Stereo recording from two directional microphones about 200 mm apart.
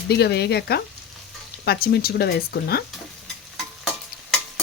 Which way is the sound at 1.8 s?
50° left (ahead or behind).